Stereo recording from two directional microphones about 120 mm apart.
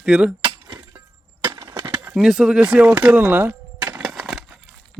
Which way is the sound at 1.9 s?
10° right (ahead or behind).